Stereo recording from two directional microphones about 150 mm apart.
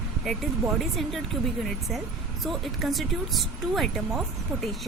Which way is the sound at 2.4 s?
Centre (ahead or behind).